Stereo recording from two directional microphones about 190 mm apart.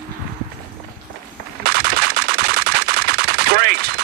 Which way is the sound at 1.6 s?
55° right (ahead or behind).